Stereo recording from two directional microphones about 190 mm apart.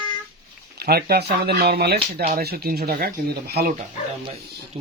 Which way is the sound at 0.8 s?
55° right (ahead or behind).